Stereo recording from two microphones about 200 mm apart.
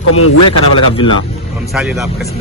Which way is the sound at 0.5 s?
25° left (ahead or behind).